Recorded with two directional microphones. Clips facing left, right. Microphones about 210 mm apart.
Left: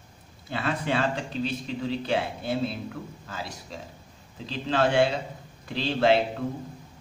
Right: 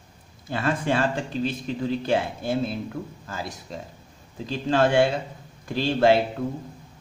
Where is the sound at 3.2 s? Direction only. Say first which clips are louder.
Right 3 dB; 50° right (ahead or behind).